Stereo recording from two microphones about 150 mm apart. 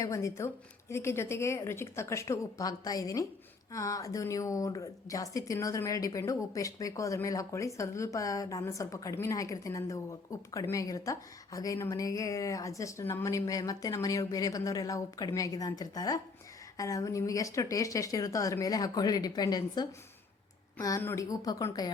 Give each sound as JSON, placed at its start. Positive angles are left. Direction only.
{"t": 0.0, "sound": "speech", "side_deg": 20}